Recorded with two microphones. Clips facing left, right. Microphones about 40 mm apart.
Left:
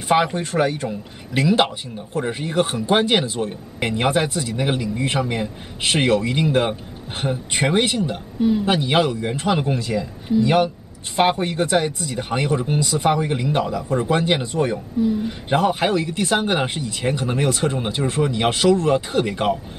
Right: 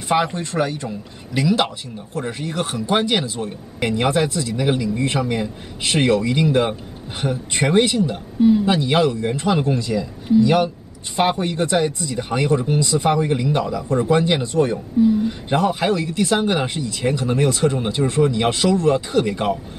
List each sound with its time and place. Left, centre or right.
0.1 s speech: centre
8.4 s a man's voice: centre
8.6 s speech: left
12.4 s speech: centre; by 19.0 s left
19.1 s speech: centre